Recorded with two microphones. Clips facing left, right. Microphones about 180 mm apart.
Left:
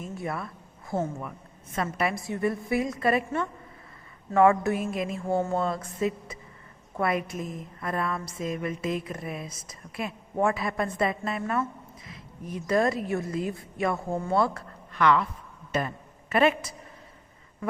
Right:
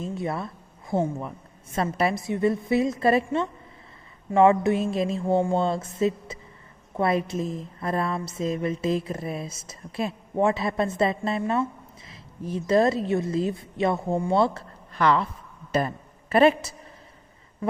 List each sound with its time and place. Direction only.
0.0 s a woman's voice: 25° right (ahead or behind)
2.1 s a woman's voice: 20° right (ahead or behind)